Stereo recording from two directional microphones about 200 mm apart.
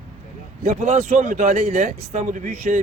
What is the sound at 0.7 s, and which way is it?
Speech, 35° right (ahead or behind).